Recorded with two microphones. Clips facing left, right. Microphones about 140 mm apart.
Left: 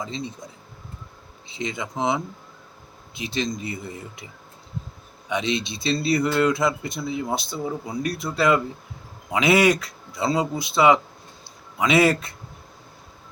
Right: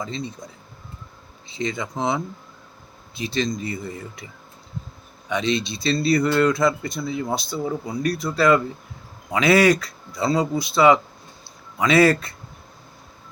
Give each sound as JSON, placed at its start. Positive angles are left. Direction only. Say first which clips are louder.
{"t": 0.0, "sound": "speech", "louder": "right 1 dB", "side_deg": 20}
{"t": 1.5, "sound": "speech", "louder": "right 2 dB", "side_deg": 15}
{"t": 5.3, "sound": "a man's voice", "louder": "right 2 dB", "side_deg": 15}